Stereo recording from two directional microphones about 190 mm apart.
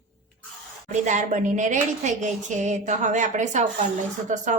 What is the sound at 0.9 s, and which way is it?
A woman's voice, 40° right (ahead or behind).